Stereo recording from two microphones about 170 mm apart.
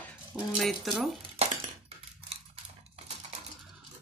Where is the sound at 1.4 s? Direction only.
40° right (ahead or behind).